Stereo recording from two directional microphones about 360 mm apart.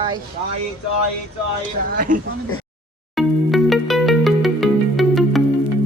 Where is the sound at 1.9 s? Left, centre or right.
Right.